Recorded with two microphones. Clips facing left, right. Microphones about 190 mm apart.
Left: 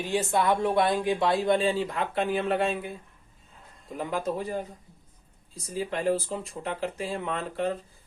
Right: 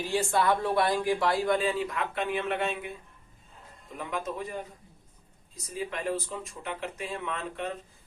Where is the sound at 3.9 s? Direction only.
35° left (ahead or behind).